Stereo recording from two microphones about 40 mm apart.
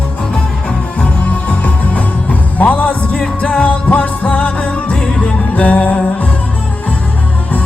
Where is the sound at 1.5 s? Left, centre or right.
Left.